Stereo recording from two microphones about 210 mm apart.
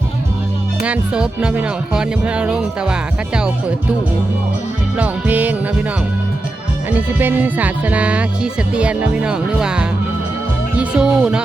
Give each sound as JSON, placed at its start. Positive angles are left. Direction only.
{"t": 0.9, "sound": "speech", "side_deg": -5}
{"t": 4.9, "sound": "music", "side_deg": -5}
{"t": 7.1, "sound": "speech", "side_deg": -10}
{"t": 10.8, "sound": "music", "side_deg": -5}